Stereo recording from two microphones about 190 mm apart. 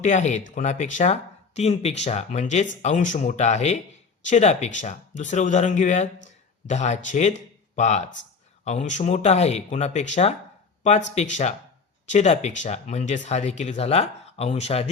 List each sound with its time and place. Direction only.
0.0 s speech: 40° left (ahead or behind)